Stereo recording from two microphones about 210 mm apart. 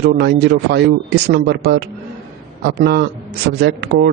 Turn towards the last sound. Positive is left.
turn(degrees=-50)  # may be behind; listen again after turning